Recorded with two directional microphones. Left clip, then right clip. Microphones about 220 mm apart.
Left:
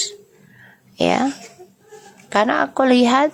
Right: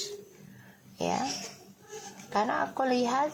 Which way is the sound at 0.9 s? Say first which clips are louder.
Left 13 dB; 45° left (ahead or behind).